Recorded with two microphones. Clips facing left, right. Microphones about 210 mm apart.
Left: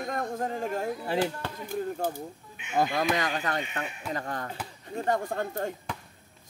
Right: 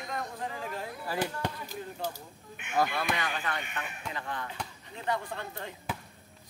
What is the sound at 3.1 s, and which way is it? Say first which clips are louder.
Speech: left 5 dB; 40° left (ahead or behind).